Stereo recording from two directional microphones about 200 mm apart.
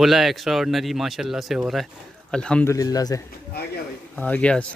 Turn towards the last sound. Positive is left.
turn(degrees=5)  # may be behind; listen again after turning